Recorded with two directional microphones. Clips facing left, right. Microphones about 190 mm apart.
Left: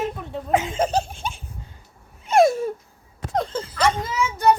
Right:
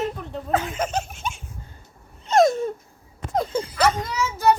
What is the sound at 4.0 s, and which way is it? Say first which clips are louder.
Speech: left 1 dB; centre (ahead or behind).